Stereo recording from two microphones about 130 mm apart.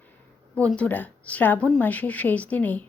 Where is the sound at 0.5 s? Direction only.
10° left (ahead or behind).